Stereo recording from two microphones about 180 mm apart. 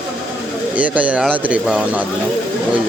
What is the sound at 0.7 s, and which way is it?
Speech, 10° right (ahead or behind).